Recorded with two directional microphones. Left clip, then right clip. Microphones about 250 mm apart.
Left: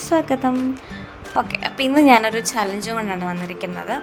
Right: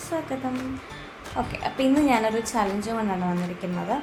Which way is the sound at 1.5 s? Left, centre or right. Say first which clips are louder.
Left 3 dB; left.